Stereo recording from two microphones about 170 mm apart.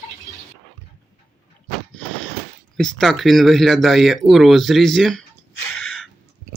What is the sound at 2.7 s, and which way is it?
Speech, 5° left (ahead or behind).